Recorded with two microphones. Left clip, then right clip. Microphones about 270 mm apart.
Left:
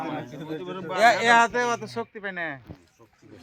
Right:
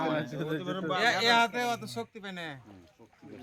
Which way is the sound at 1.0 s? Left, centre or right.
Centre.